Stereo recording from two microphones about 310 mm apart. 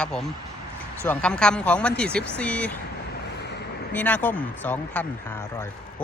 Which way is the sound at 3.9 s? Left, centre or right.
Centre.